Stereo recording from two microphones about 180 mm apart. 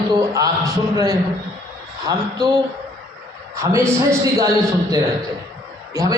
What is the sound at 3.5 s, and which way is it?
A man's voice, 15° right (ahead or behind).